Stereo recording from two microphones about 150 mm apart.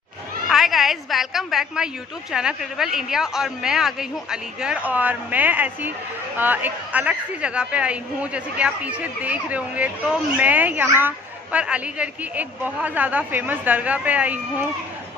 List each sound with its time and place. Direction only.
0.5 s a woman's voice: centre (ahead or behind)